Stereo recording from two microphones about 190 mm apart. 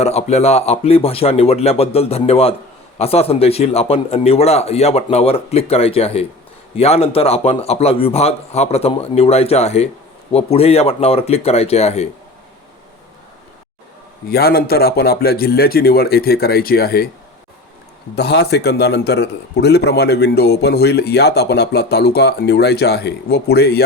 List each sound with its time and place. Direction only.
0.0 s speech: 35° left (ahead or behind)
14.3 s speech: 55° left (ahead or behind)
18.1 s a man's voice: 60° left (ahead or behind)